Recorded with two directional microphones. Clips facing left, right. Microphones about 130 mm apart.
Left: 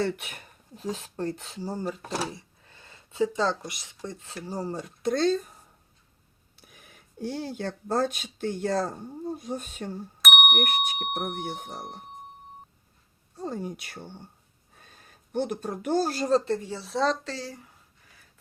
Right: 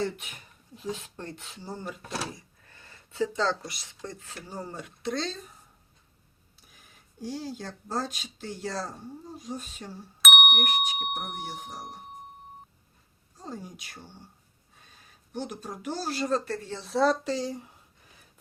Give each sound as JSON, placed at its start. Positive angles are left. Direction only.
{"t": 0.0, "sound": "speech", "side_deg": 65}
{"t": 0.8, "sound": "speech", "side_deg": 40}
{"t": 2.6, "sound": "speech", "side_deg": 20}
{"t": 6.7, "sound": "speech", "side_deg": 65}
{"t": 10.2, "sound": "bicycle bell", "side_deg": 0}
{"t": 11.3, "sound": "speech", "side_deg": 55}
{"t": 13.4, "sound": "speech", "side_deg": 55}
{"t": 14.8, "sound": "speech", "side_deg": 50}
{"t": 16.3, "sound": "speech", "side_deg": 20}
{"t": 16.6, "sound": "speech", "side_deg": 5}
{"t": 17.2, "sound": "speech", "side_deg": -20}